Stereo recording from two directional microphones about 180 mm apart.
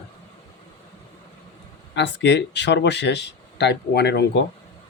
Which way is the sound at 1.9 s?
75° left (ahead or behind).